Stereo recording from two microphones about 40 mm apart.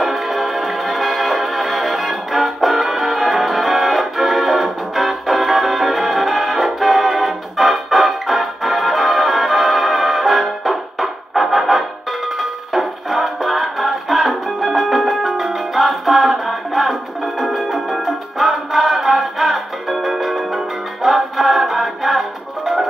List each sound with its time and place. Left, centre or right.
0.0 s music: centre